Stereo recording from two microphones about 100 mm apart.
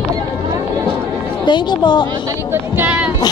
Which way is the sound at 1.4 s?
50° left (ahead or behind).